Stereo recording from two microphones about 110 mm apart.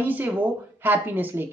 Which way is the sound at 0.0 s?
15° right (ahead or behind).